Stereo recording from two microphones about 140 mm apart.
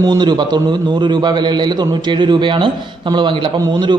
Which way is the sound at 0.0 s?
30° right (ahead or behind).